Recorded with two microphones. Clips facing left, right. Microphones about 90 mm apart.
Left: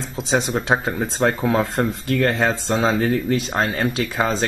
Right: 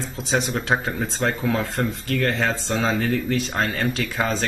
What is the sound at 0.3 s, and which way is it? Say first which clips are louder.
Speech: left 3 dB; 20° left (ahead or behind).